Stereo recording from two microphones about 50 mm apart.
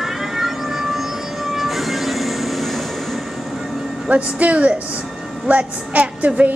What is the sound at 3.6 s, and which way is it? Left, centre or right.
Music, centre.